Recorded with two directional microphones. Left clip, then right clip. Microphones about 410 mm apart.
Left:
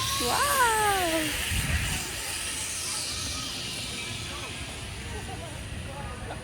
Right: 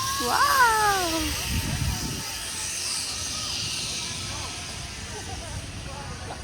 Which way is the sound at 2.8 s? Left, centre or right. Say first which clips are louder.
Right 4 dB; centre.